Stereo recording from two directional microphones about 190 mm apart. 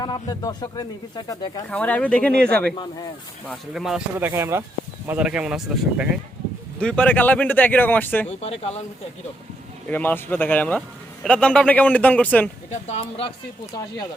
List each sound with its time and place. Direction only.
0.0 s speech: 20° left (ahead or behind)
1.7 s speech: 5° left (ahead or behind)
8.3 s speech: 30° left (ahead or behind)
9.9 s speech: 10° left (ahead or behind)
12.9 s speech: 30° left (ahead or behind)